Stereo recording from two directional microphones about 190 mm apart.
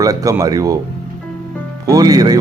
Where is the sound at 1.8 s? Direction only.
20° right (ahead or behind).